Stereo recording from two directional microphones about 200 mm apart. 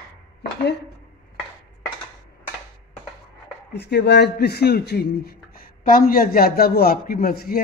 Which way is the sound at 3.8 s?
55° left (ahead or behind).